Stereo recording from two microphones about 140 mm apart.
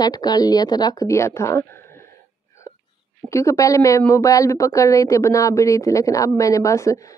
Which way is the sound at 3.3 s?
20° left (ahead or behind).